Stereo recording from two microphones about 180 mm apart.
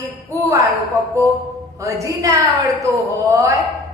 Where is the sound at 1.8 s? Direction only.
20° right (ahead or behind).